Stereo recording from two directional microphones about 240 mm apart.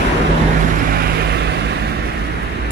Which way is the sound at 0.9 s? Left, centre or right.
Right.